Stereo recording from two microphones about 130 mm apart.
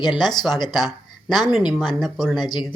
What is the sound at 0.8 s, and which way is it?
Speech, centre (ahead or behind).